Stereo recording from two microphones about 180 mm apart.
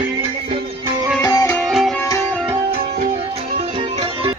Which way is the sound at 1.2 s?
20° left (ahead or behind).